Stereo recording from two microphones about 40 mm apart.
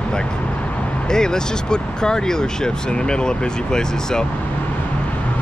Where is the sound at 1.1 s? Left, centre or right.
Centre.